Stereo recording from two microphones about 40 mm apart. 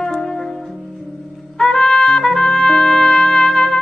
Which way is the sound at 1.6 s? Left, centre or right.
Centre.